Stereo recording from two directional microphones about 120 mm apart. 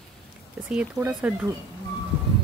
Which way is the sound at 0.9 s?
15° right (ahead or behind).